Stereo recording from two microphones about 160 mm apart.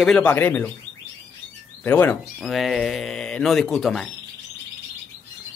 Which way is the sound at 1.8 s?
10° left (ahead or behind).